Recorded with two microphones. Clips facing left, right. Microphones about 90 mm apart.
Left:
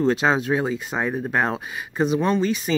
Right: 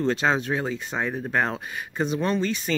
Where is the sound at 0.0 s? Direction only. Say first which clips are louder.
Left 3 dB; 10° left (ahead or behind).